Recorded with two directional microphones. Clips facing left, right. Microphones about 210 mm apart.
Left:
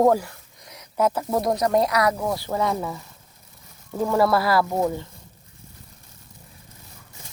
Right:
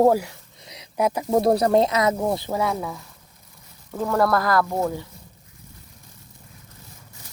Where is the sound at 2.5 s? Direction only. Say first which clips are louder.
Even; 10° right (ahead or behind).